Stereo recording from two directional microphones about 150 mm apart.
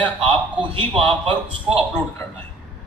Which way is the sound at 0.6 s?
35° right (ahead or behind).